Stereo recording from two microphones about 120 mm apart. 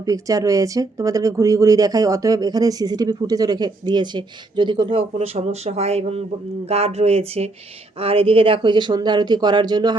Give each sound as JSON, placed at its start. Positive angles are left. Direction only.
{"t": 0.0, "sound": "speech", "side_deg": -30}